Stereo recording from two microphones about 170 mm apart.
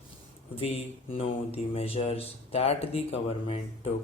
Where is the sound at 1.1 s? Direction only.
35° left (ahead or behind).